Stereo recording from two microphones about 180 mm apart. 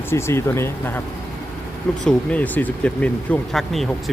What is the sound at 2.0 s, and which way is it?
Speech, 10° left (ahead or behind).